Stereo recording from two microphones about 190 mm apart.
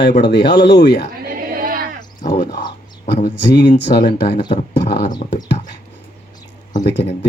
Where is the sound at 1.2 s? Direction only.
50° right (ahead or behind).